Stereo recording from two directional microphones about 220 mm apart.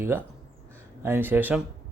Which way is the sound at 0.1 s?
10° right (ahead or behind).